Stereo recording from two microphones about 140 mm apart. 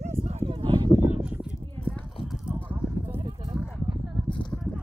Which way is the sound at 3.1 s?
45° right (ahead or behind).